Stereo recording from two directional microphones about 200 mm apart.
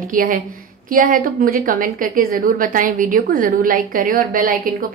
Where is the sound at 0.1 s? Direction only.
40° right (ahead or behind).